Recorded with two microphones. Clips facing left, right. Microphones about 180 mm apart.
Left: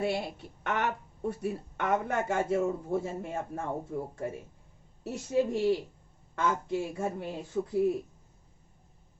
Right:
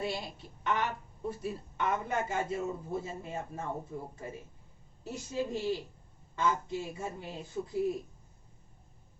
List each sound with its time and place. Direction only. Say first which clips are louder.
0.0 s a woman's voice: left 5 dB; 60° left (ahead or behind)